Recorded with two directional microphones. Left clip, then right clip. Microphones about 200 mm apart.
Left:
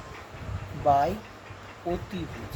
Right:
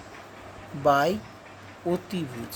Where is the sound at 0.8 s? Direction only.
40° right (ahead or behind).